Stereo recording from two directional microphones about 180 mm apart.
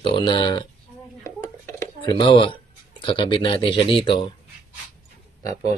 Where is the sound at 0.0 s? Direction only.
25° left (ahead or behind).